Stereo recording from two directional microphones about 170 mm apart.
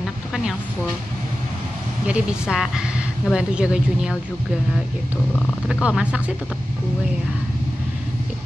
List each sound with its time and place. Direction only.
2.0 s speech: 5° right (ahead or behind)
5.7 s speech: 5° right (ahead or behind)